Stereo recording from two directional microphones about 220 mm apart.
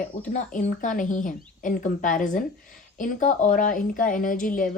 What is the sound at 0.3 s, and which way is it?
A woman's voice, 35° left (ahead or behind).